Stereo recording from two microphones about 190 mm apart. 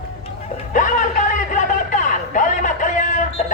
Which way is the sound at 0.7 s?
45° left (ahead or behind).